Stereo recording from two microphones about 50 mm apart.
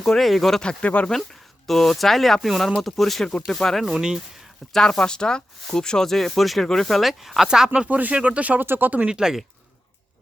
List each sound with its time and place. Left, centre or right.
0.0 s speech: centre
0.6 s speech: centre
1.6 s speech: centre
4.7 s speech: centre
7.9 s speech: right
8.6 s speech: right
9.0 s speech: centre